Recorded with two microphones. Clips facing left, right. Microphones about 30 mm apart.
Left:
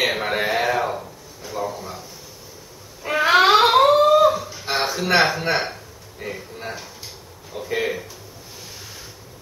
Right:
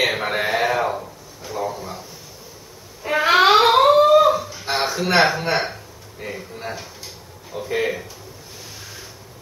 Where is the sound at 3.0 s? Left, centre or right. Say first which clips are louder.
Even; centre.